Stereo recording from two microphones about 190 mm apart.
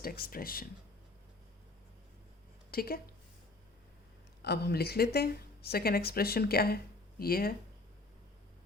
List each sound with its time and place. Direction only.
0.0 s speech: 50° left (ahead or behind)
2.6 s a woman's voice: 50° left (ahead or behind)
4.4 s speech: 60° left (ahead or behind)